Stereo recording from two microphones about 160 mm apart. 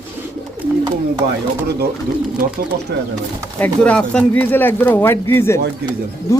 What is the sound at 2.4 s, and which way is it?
Speech, 60° right (ahead or behind).